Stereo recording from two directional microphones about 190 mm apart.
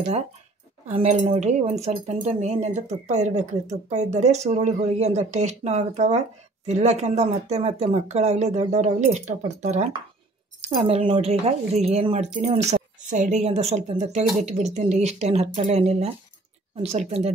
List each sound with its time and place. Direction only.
0.8 s speech: 35° right (ahead or behind)